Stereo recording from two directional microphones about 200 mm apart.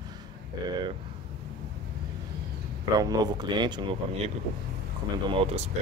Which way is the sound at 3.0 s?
20° right (ahead or behind).